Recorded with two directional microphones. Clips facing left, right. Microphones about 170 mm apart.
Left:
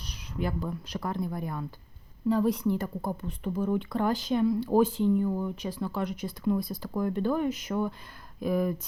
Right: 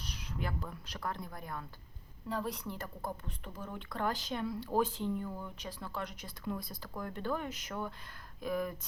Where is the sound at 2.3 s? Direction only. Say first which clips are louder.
Left 13 dB; 5° left (ahead or behind).